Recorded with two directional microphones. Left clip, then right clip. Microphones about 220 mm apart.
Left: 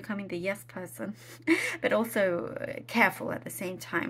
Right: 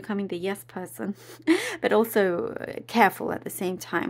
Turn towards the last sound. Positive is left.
turn(degrees=-40)  # may be behind; listen again after turning